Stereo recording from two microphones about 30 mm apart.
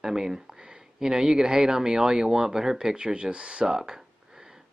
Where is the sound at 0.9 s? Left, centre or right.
Right.